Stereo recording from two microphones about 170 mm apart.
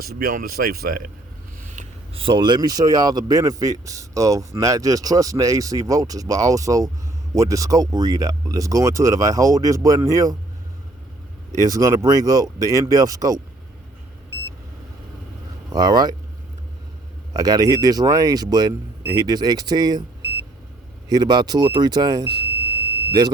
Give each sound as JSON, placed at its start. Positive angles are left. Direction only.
{"t": 0.0, "sound": "speech", "side_deg": -60}
{"t": 1.6, "sound": "a sound", "side_deg": -45}
{"t": 2.1, "sound": "speech", "side_deg": -30}
{"t": 11.5, "sound": "speech", "side_deg": -20}
{"t": 15.7, "sound": "speech", "side_deg": -25}
{"t": 17.3, "sound": "speech", "side_deg": -20}
{"t": 21.1, "sound": "speech", "side_deg": -25}